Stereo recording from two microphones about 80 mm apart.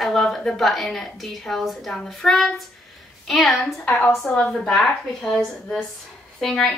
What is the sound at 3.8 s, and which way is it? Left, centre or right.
Speech, left.